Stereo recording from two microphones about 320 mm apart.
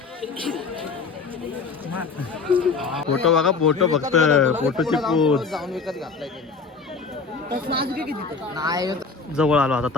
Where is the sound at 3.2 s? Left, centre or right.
Centre.